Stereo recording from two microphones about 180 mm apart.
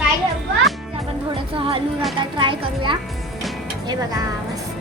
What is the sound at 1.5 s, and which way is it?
A child's voice, 30° right (ahead or behind).